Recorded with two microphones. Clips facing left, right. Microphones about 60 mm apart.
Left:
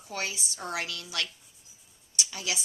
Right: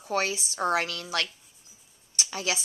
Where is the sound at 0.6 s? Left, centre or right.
Right.